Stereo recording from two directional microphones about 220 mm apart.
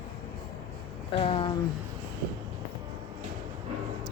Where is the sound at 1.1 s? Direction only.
25° left (ahead or behind).